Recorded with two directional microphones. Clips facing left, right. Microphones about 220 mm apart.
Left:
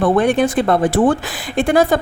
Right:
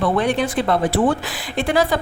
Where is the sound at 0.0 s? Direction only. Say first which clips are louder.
Left 5 dB; 50° left (ahead or behind).